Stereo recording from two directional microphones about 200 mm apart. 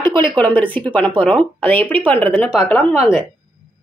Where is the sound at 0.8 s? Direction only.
10° left (ahead or behind).